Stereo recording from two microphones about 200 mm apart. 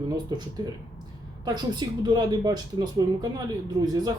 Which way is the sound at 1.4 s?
20° right (ahead or behind).